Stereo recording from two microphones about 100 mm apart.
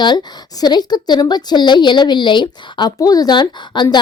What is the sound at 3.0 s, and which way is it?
Speech, 40° left (ahead or behind).